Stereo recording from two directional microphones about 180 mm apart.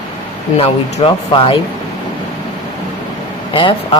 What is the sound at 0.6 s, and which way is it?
Speech, 30° left (ahead or behind).